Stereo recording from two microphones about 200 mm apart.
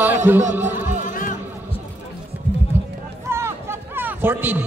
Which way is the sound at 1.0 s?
40° left (ahead or behind).